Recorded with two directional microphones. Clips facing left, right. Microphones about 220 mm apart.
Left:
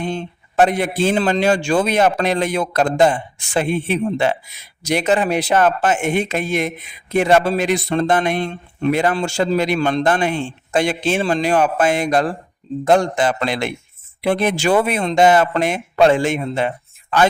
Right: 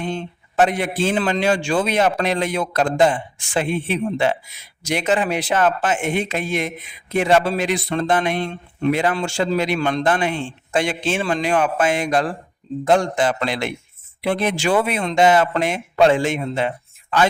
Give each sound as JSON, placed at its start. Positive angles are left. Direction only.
{"t": 0.5, "sound": "a man's voice", "side_deg": 40}